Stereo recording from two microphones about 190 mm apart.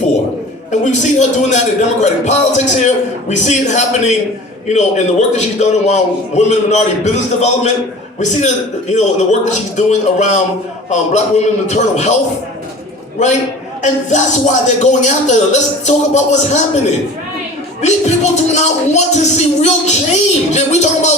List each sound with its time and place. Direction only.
0.7 s a man's voice: 40° left (ahead or behind)
13.8 s a man's voice: 40° left (ahead or behind)
17.8 s a man's voice: 35° left (ahead or behind)